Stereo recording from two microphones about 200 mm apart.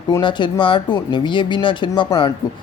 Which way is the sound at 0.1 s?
25° left (ahead or behind).